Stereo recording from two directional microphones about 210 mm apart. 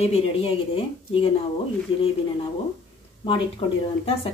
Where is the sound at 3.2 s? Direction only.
25° left (ahead or behind).